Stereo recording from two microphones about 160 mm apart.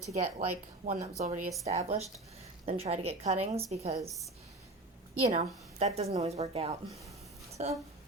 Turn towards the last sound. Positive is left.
turn(degrees=-45)  # may be behind; listen again after turning